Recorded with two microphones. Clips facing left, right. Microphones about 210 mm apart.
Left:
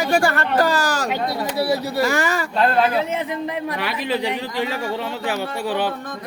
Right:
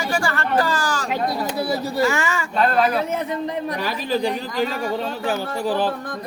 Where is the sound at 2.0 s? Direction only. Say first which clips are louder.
Right 1 dB; 35° left (ahead or behind).